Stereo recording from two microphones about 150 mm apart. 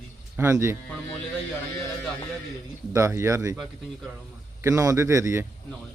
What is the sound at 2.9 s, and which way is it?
Speech, 20° right (ahead or behind).